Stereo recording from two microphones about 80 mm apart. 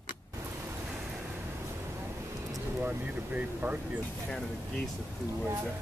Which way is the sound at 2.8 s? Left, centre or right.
Right.